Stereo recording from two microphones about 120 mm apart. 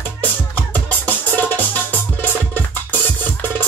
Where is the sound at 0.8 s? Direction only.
15° left (ahead or behind).